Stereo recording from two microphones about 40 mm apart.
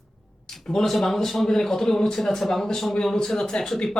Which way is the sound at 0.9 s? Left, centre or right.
Centre.